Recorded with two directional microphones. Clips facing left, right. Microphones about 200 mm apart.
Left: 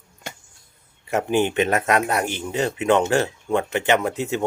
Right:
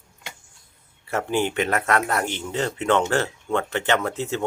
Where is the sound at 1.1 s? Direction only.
15° left (ahead or behind).